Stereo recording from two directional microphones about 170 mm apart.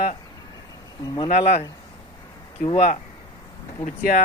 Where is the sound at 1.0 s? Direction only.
25° left (ahead or behind).